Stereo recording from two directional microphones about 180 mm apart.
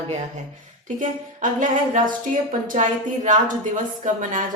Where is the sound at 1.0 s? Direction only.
45° right (ahead or behind).